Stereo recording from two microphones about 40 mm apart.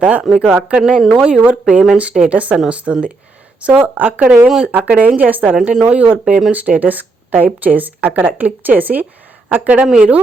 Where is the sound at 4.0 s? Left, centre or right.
Right.